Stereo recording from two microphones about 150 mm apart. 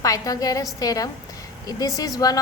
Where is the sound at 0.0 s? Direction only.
25° left (ahead or behind).